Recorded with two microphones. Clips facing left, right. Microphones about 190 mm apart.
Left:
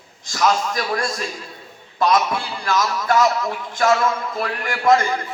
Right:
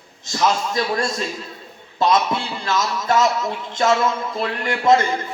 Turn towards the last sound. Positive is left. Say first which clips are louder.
# right 1 dB
turn(degrees=-25)  # may be behind; listen again after turning